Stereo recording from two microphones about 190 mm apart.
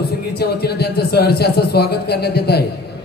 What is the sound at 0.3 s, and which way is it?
Speech, 60° left (ahead or behind).